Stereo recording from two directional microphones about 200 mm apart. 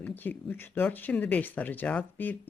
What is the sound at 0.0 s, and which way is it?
Speech, 10° left (ahead or behind).